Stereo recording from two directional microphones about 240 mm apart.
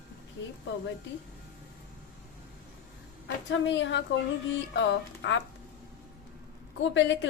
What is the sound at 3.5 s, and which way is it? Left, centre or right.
A woman's voice, left.